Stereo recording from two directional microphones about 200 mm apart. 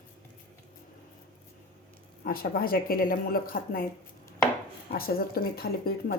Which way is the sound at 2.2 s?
50° left (ahead or behind).